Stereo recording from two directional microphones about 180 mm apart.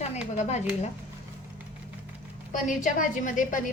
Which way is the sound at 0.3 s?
40° left (ahead or behind).